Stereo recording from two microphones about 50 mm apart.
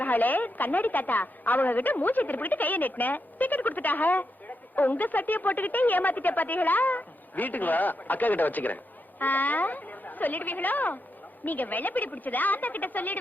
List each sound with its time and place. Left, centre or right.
0.0 s a woman's voice: left